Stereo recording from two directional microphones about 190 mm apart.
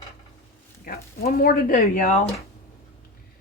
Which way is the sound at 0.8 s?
50° left (ahead or behind).